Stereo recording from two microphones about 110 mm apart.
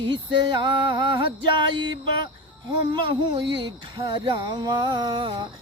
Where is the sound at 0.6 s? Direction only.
50° right (ahead or behind).